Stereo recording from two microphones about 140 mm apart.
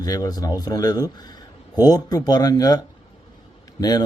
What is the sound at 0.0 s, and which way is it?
A man's voice, 25° left (ahead or behind).